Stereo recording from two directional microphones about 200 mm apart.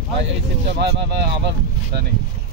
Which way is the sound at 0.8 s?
55° right (ahead or behind).